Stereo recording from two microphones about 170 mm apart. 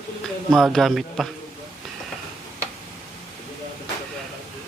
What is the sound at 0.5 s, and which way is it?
Speech, centre (ahead or behind).